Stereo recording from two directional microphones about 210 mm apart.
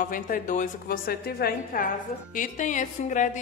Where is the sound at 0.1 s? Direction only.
40° left (ahead or behind).